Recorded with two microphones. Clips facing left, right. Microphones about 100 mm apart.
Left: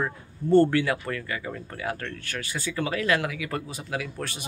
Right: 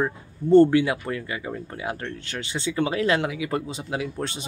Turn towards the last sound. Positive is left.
turn(degrees=-25)  # may be behind; listen again after turning